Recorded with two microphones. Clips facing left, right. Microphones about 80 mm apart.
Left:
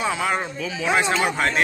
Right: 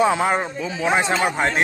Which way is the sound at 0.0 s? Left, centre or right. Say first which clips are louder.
Right 5 dB; right.